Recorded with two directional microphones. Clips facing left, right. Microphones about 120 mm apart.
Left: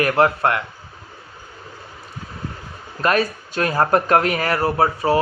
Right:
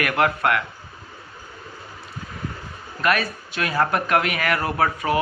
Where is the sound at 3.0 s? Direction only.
35° left (ahead or behind).